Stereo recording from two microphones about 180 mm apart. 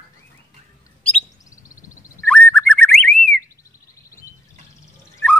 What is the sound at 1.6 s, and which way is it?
Frog, 15° left (ahead or behind).